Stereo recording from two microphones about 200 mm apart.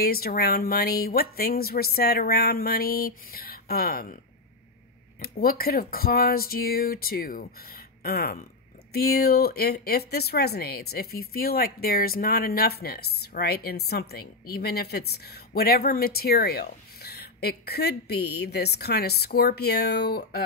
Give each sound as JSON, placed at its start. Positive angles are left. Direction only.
{"t": 0.0, "sound": "speech", "side_deg": 50}
{"t": 5.2, "sound": "speech", "side_deg": 50}